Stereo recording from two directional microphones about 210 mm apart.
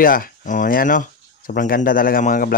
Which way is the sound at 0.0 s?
40° left (ahead or behind).